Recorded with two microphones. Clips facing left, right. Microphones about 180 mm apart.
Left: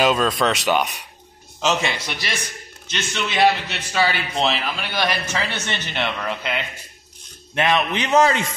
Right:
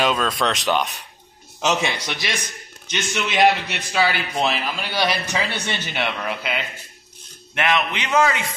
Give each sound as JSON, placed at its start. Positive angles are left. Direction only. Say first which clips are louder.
{"t": 0.0, "sound": "speech", "louder": "left 3 dB", "side_deg": 5}
{"t": 1.6, "sound": "a man's voice", "louder": "even", "side_deg": -15}
{"t": 7.5, "sound": "a man's voice", "louder": "left 2 dB", "side_deg": 20}
{"t": 8.1, "sound": "speech", "louder": "left 2 dB", "side_deg": 30}